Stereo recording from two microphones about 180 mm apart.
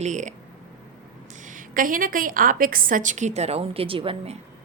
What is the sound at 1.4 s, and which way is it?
A woman's voice, 45° right (ahead or behind).